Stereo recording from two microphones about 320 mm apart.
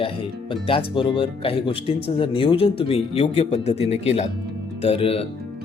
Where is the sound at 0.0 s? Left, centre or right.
Centre.